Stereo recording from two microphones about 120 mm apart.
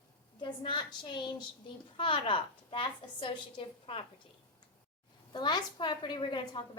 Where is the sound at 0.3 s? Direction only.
40° left (ahead or behind).